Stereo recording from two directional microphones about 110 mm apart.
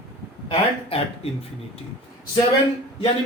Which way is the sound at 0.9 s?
60° left (ahead or behind).